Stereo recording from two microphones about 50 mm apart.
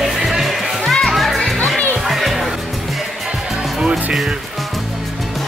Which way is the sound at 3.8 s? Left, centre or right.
Centre.